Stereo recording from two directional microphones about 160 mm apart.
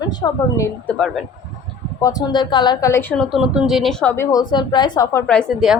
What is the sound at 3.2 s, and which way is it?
Speech, 5° right (ahead or behind).